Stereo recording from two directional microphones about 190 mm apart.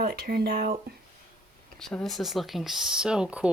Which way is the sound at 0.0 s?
55° right (ahead or behind).